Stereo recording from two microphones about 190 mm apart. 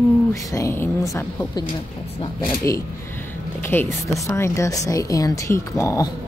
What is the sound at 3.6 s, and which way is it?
Speech, 10° left (ahead or behind).